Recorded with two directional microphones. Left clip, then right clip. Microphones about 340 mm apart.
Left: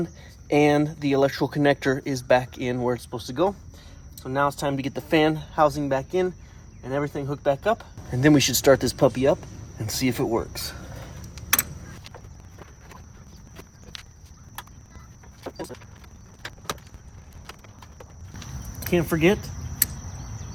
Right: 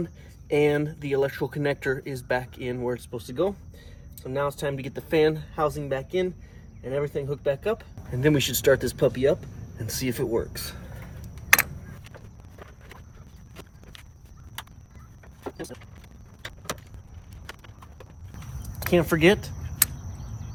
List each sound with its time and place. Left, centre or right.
0.4 s speech: centre
13.9 s clip-clop: centre
18.8 s speech: centre